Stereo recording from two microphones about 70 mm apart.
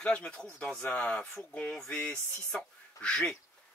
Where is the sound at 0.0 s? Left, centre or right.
Centre.